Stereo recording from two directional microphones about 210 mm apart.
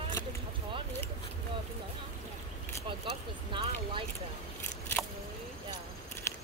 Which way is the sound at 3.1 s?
25° right (ahead or behind).